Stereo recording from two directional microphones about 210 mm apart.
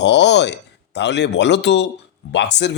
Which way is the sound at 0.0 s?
55° left (ahead or behind).